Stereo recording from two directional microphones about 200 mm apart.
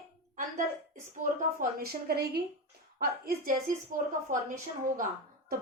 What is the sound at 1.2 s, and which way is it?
A woman's voice, 45° right (ahead or behind).